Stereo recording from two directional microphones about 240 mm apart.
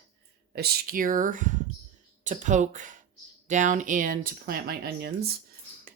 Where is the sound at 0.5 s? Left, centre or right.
Right.